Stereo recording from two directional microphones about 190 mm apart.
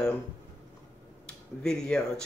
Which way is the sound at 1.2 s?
5° left (ahead or behind).